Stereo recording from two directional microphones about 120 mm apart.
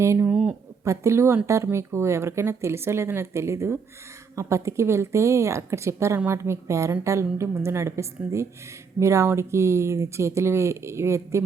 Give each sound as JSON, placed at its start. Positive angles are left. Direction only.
{"t": 0.0, "sound": "speech", "side_deg": -25}
{"t": 0.3, "sound": "a sound", "side_deg": -5}
{"t": 0.9, "sound": "speech", "side_deg": -25}